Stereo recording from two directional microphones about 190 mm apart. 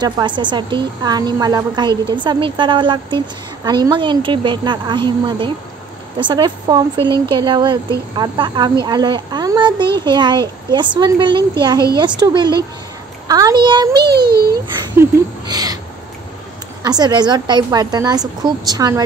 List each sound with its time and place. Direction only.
0.0 s a woman's voice: 25° right (ahead or behind)
14.1 s a child's voice: 55° right (ahead or behind)
14.5 s a woman's voice: 20° right (ahead or behind)
16.8 s a woman's voice: 20° right (ahead or behind)